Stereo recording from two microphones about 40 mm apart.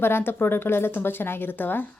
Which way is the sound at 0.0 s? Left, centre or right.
Left.